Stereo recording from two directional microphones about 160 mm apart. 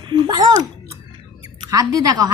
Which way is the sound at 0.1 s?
25° right (ahead or behind).